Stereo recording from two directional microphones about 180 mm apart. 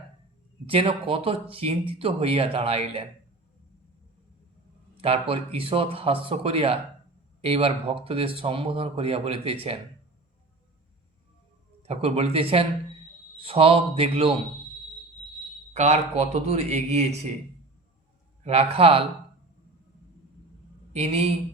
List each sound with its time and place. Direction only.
0.7 s speech: 30° right (ahead or behind)
4.9 s speech: 30° right (ahead or behind)
11.8 s speech: 35° right (ahead or behind)
15.7 s speech: 35° right (ahead or behind)
18.4 s speech: 35° right (ahead or behind)
20.9 s speech: 35° right (ahead or behind)